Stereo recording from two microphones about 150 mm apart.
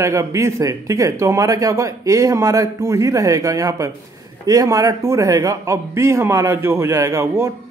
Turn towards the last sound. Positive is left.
turn(degrees=-20)  # may be behind; listen again after turning